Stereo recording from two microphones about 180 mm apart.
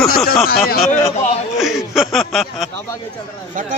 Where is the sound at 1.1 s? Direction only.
40° left (ahead or behind).